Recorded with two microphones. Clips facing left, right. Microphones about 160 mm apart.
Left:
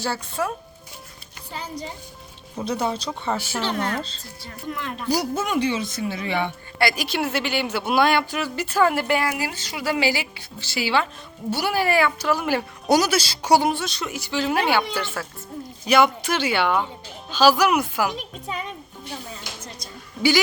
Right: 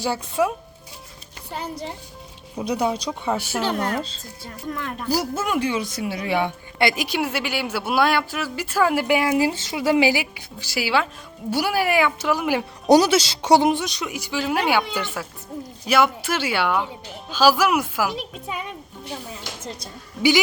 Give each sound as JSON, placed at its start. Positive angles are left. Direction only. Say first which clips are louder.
{"t": 0.0, "sound": "speech", "louder": "right 4 dB", "side_deg": -15}
{"t": 2.6, "sound": "speech", "louder": "right 2 dB", "side_deg": -10}
{"t": 6.7, "sound": "speech", "louder": "right 1 dB", "side_deg": -20}
{"t": 9.4, "sound": "speech", "louder": "right 7 dB", "side_deg": -25}
{"t": 12.9, "sound": "speech", "louder": "right 4 dB", "side_deg": -25}
{"t": 14.9, "sound": "speech", "louder": "even", "side_deg": -15}
{"t": 15.9, "sound": "speech", "louder": "left 1 dB", "side_deg": -5}